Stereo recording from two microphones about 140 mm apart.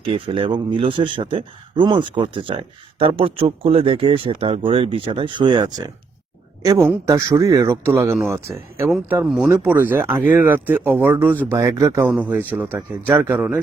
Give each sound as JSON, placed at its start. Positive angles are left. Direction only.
{"t": 0.0, "sound": "a man's voice", "side_deg": -40}
{"t": 6.7, "sound": "speech", "side_deg": -20}